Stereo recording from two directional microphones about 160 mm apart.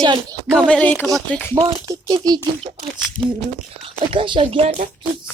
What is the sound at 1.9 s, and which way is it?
Speech, 25° right (ahead or behind).